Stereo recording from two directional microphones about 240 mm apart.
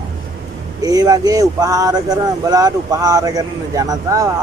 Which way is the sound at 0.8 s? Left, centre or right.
Centre.